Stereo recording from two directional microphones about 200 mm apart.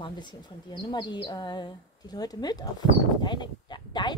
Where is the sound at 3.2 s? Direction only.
20° left (ahead or behind).